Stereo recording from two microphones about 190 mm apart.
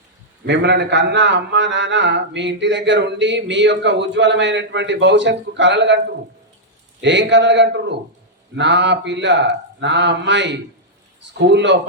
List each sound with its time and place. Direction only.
0.4 s a man's voice: 65° right (ahead or behind)
7.0 s a man's voice: 70° right (ahead or behind)